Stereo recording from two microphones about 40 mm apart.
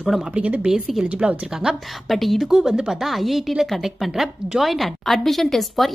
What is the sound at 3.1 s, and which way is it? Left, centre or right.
A woman's voice, centre.